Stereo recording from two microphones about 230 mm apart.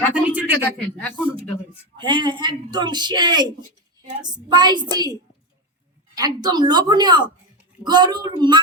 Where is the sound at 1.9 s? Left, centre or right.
Right.